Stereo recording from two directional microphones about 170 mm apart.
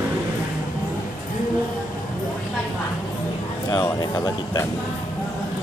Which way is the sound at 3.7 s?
20° left (ahead or behind).